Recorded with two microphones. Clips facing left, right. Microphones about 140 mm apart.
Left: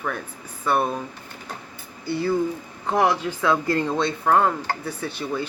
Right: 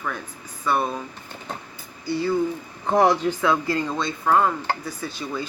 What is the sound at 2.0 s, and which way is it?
Speech, 55° left (ahead or behind).